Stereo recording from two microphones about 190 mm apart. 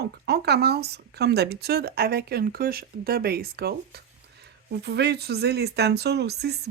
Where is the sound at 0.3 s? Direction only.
60° right (ahead or behind).